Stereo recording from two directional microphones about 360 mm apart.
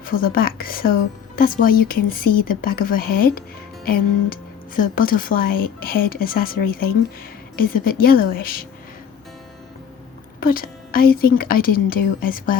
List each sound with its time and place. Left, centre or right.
0.0 s a woman's voice: left
10.4 s a woman's voice: left